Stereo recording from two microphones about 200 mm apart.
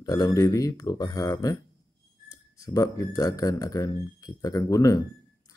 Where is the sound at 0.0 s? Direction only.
15° left (ahead or behind).